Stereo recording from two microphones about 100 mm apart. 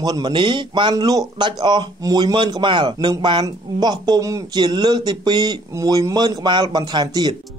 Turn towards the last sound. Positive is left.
turn(degrees=-45)  # may be behind; listen again after turning